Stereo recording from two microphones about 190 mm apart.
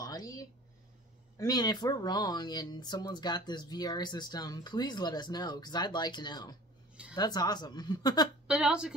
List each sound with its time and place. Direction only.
0.0 s a sound: 20° left (ahead or behind)
1.4 s speech: 20° left (ahead or behind)
8.5 s a woman's voice: 5° right (ahead or behind)